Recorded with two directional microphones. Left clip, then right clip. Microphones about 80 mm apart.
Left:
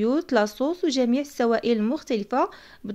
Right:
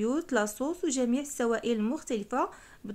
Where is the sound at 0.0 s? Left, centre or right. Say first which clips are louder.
Left 7 dB; left.